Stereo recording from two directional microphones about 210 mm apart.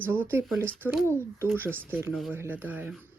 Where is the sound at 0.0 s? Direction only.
10° right (ahead or behind).